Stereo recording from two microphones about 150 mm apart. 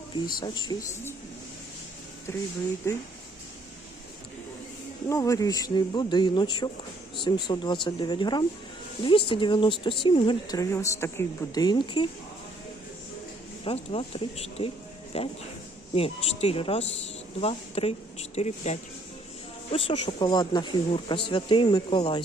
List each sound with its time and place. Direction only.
0.3 s speech: 30° left (ahead or behind)
2.3 s speech: 15° left (ahead or behind)
5.0 s speech: 20° left (ahead or behind)
10.6 s speech: 20° left (ahead or behind)
13.7 s speech: 40° left (ahead or behind)
19.7 s speech: 35° left (ahead or behind)